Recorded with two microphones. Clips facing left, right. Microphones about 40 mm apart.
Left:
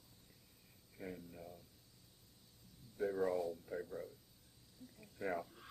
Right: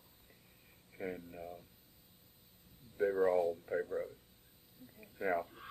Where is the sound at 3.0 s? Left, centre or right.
Right.